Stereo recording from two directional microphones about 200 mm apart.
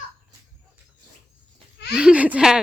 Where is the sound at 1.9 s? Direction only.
5° right (ahead or behind).